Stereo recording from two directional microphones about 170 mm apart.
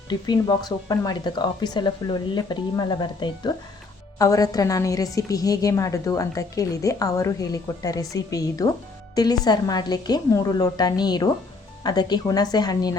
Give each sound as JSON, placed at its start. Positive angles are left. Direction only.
{"t": 0.1, "sound": "a woman's voice", "side_deg": 25}